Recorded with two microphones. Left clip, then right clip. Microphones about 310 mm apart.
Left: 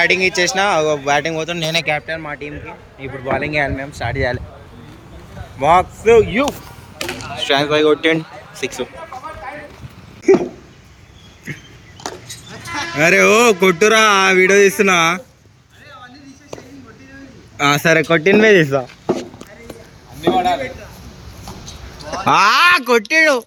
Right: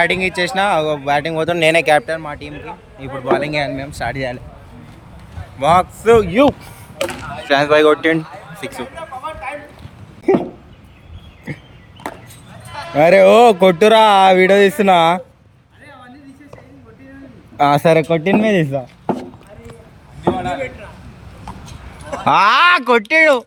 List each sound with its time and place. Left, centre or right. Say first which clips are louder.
0.0 s speech: left 2 dB; centre
1.5 s speech: right 6 dB; right
1.9 s a man's voice: right 6 dB; centre
5.5 s a man's voice: even; centre
9.0 s a sound: right 3 dB; right
13.0 s a man's voice: right 4 dB; centre
17.6 s a man's voice: right 2 dB; centre
20.3 s a sound: left 6 dB; left
22.2 s a man's voice: right 1 dB; centre